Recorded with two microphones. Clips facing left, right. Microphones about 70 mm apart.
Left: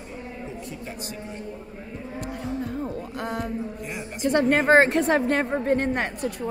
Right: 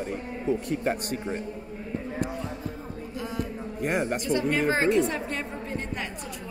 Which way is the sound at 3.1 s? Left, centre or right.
Left.